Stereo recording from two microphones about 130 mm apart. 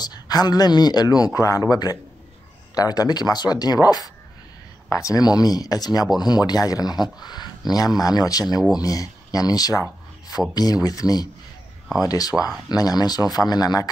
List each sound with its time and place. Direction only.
0.0 s speech: 30° left (ahead or behind)